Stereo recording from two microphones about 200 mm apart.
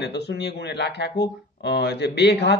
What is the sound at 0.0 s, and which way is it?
Speech, 60° left (ahead or behind).